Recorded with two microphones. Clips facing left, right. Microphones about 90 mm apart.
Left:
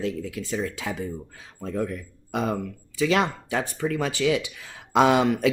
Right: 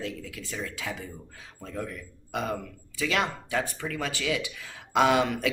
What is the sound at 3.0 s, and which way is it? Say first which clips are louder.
Speech: left 6 dB; 30° left (ahead or behind).